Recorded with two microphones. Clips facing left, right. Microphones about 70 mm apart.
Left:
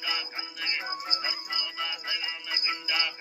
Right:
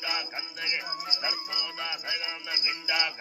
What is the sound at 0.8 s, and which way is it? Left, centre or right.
Music, left.